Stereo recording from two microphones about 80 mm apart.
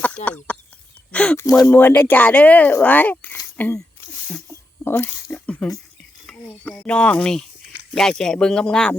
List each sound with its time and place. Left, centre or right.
0.0 s speech: centre
1.6 s speech: left
4.8 s speech: left
5.5 s speech: centre